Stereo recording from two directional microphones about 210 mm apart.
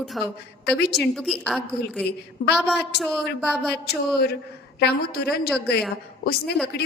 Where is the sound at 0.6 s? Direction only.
50° left (ahead or behind).